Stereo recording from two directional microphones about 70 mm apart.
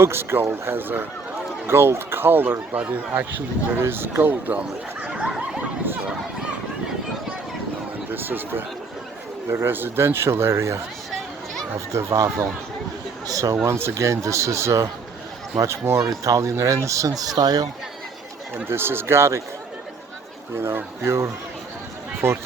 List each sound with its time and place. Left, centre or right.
0.0 s speech: right; by 5.6 s centre
8.1 s speech: right
11.9 s speech: right
13.7 s speech: right
18.5 s speech: right
20.6 s speech: right